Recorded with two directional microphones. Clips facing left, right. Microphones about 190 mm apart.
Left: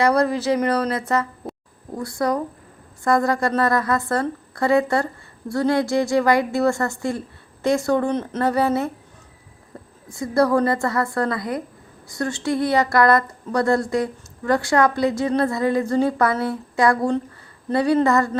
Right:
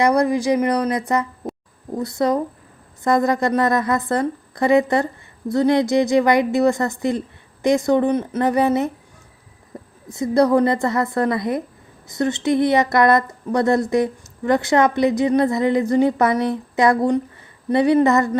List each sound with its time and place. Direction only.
0.0 s a woman's voice: 15° right (ahead or behind)
9.7 s a sound: 20° right (ahead or behind)
10.1 s a woman's voice: 20° right (ahead or behind)